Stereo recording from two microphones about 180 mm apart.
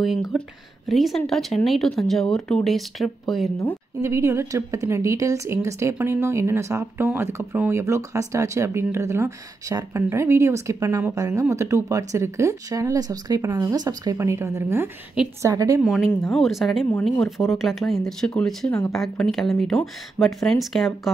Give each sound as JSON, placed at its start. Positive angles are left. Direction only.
{"t": 0.0, "sound": "speech", "side_deg": 0}
{"t": 4.0, "sound": "a woman's voice", "side_deg": -15}
{"t": 15.8, "sound": "speech", "side_deg": 0}